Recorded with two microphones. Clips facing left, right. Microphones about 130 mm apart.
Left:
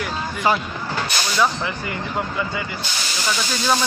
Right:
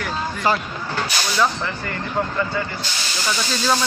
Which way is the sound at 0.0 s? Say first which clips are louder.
Even; 5° left (ahead or behind).